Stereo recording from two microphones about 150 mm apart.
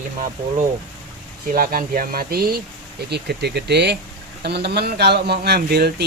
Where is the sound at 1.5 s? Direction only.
70° right (ahead or behind); by 6.0 s 90° right.